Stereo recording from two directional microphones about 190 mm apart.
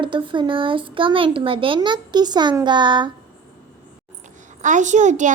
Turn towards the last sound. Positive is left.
turn(degrees=-40)  # may be behind; listen again after turning